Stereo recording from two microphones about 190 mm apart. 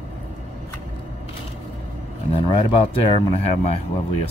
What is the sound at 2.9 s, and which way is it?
Speech, 30° left (ahead or behind).